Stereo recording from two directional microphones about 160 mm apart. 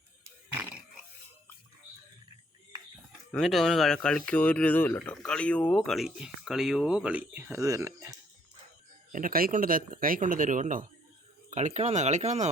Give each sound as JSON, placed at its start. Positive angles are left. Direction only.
{"t": 0.5, "sound": "a sound", "side_deg": -15}
{"t": 3.3, "sound": "speech", "side_deg": 0}
{"t": 9.1, "sound": "speech", "side_deg": -65}